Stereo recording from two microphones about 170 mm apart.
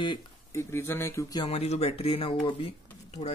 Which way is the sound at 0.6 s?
15° left (ahead or behind).